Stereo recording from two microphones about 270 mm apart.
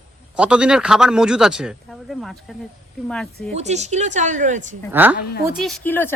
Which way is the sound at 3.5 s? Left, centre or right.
Right.